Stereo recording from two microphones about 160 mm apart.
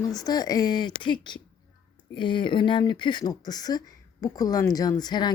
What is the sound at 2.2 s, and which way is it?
A woman's voice, 30° left (ahead or behind).